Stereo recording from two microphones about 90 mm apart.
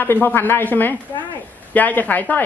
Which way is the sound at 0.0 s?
25° left (ahead or behind).